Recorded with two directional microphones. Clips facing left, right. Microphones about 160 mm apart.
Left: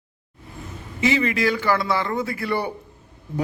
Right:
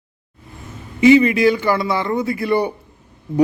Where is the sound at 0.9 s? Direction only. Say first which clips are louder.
Right 10 dB; 15° right (ahead or behind).